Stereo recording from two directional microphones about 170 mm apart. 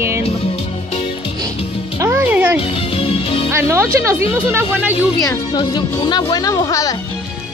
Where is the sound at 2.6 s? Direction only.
35° left (ahead or behind).